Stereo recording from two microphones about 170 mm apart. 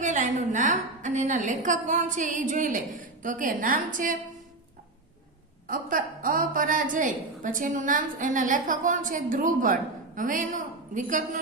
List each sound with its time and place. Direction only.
0.0 s a woman's voice: 45° right (ahead or behind)
5.6 s a woman's voice: 55° right (ahead or behind)